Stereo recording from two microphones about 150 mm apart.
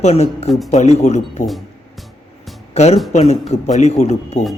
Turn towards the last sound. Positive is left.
turn(degrees=50)  # may be behind; listen again after turning